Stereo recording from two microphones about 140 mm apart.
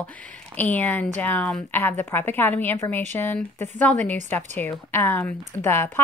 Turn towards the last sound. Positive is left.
turn(degrees=15)  # may be behind; listen again after turning